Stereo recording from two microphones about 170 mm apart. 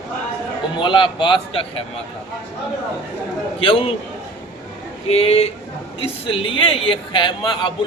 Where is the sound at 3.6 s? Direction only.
30° left (ahead or behind).